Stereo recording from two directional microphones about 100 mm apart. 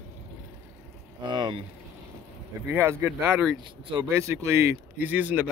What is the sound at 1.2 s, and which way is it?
Speech, 50° right (ahead or behind).